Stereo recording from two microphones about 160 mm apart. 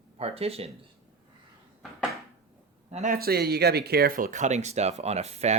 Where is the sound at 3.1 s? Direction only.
75° right (ahead or behind); by 5.5 s 45° right (ahead or behind).